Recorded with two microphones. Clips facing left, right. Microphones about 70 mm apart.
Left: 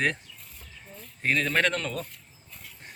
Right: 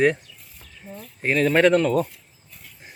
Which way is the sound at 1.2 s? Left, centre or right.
Centre.